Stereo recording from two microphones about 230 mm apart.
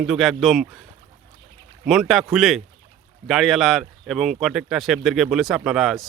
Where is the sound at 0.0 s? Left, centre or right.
Centre.